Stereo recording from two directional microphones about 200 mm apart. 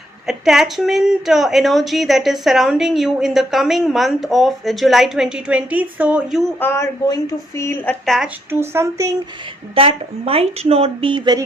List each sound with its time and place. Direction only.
0.3 s a woman's voice: centre (ahead or behind)
6.6 s a woman's voice: 10° left (ahead or behind)
8.4 s speech: 10° right (ahead or behind)
9.7 s speech: 30° right (ahead or behind)